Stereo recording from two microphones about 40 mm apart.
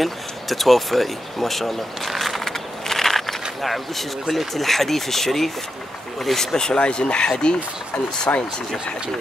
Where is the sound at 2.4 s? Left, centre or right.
Centre.